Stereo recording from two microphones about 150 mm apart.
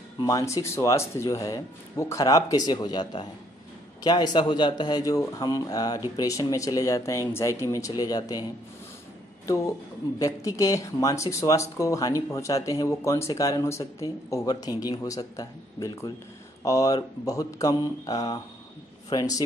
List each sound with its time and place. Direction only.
0.2 s speech: 25° left (ahead or behind)
10.1 s speech: 25° left (ahead or behind)